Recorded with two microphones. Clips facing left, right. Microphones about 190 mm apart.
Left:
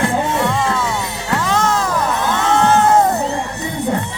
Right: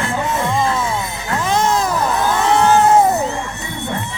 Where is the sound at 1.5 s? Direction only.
20° right (ahead or behind).